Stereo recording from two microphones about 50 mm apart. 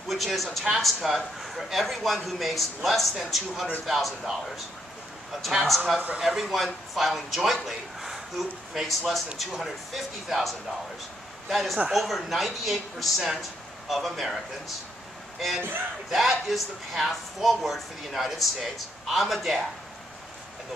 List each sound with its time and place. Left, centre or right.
0.1 s speech: centre
5.5 s speech: centre
5.9 s speech: right
6.2 s speech: centre
16.1 s speech: centre